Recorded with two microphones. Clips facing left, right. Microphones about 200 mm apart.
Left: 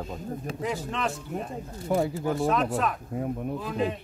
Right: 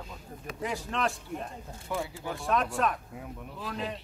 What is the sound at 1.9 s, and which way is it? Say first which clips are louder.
Speech: left 9 dB; 40° left (ahead or behind).